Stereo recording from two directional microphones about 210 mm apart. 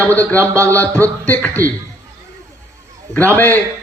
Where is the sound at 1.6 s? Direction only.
45° right (ahead or behind).